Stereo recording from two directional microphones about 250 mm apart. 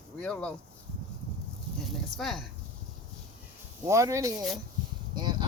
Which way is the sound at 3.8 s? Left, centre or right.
Centre.